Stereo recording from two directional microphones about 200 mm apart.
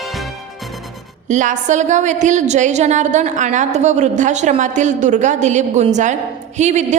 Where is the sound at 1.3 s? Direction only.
40° right (ahead or behind).